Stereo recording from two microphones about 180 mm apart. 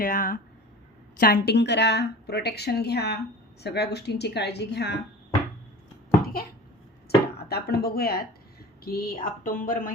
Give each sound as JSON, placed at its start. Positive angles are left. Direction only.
{"t": 0.0, "sound": "speech", "side_deg": 50}
{"t": 1.2, "sound": "a woman's voice", "side_deg": 60}
{"t": 7.1, "sound": "speech", "side_deg": 60}